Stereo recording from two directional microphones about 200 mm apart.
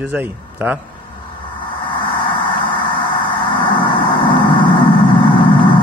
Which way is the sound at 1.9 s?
25° left (ahead or behind).